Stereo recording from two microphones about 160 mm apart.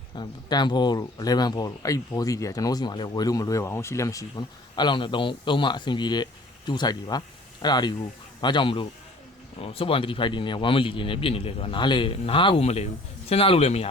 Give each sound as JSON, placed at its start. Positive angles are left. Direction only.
{"t": 0.2, "sound": "speech", "side_deg": 25}